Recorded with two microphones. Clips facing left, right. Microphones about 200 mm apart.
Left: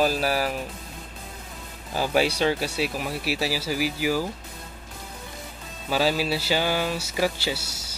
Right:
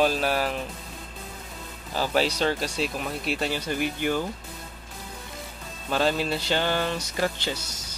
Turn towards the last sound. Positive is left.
turn(degrees=10)  # may be behind; listen again after turning